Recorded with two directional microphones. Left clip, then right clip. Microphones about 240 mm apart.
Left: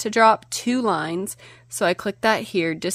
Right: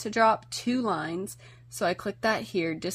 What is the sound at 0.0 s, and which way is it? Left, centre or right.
Speech, left.